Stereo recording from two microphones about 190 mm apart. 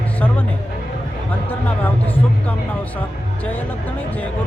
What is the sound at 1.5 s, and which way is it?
Speech, 10° left (ahead or behind).